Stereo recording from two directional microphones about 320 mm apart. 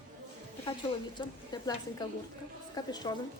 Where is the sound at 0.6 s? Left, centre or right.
Centre.